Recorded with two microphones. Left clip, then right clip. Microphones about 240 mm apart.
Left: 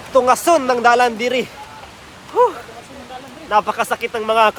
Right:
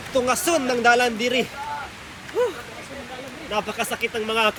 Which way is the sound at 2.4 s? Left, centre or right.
Left.